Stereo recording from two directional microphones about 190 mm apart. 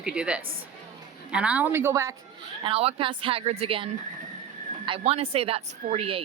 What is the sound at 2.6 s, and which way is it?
Speech, 30° right (ahead or behind).